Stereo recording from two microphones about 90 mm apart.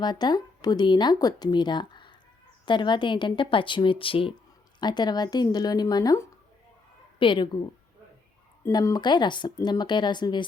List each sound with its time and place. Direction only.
0.0 s speech: 50° left (ahead or behind); by 4.4 s 80° left
4.8 s speech: 55° left (ahead or behind)
7.2 s speech: 65° left (ahead or behind)
8.7 s speech: 45° left (ahead or behind)